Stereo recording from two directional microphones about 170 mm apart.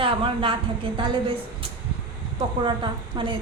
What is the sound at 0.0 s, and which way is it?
A woman's voice, 30° right (ahead or behind).